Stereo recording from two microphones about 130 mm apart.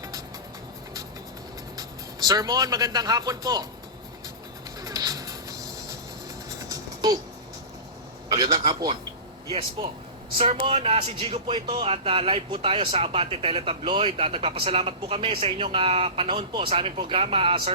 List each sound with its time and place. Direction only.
1.7 s speech: 30° right (ahead or behind)
4.8 s music: 30° right (ahead or behind)
6.7 s a sound: 30° right (ahead or behind)
8.3 s a man's voice: 50° right (ahead or behind)